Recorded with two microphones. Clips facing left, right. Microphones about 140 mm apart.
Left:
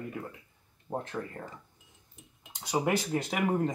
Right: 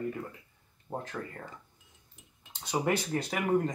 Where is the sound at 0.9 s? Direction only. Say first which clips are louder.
Left 2 dB; 15° left (ahead or behind).